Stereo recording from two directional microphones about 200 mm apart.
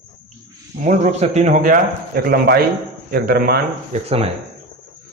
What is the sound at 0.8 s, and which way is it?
A man's voice, 35° right (ahead or behind).